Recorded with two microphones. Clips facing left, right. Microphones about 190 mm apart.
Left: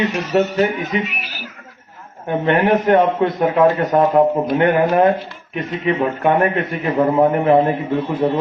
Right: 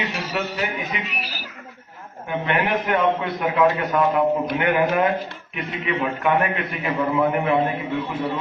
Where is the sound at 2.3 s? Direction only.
35° left (ahead or behind).